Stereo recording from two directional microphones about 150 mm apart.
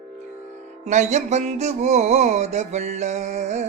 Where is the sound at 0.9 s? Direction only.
50° right (ahead or behind).